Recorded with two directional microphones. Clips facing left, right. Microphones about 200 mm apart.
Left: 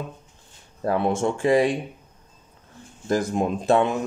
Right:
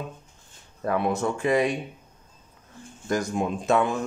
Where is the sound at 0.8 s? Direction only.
30° left (ahead or behind).